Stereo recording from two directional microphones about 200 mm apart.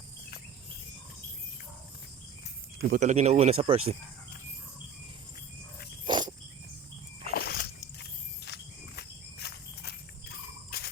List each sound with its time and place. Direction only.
2.9 s speech: 35° right (ahead or behind)
6.1 s cricket: 20° right (ahead or behind)
7.3 s walk: 50° left (ahead or behind)
10.7 s a sound: 50° left (ahead or behind)